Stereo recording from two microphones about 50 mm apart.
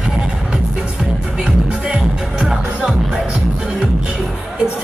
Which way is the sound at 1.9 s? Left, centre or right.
Centre.